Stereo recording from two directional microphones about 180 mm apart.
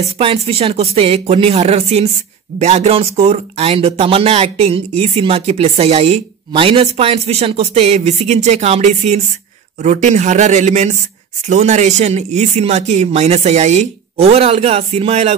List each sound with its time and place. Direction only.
0.2 s speech: 30° right (ahead or behind)